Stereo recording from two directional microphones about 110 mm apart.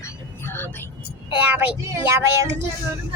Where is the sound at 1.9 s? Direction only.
30° right (ahead or behind).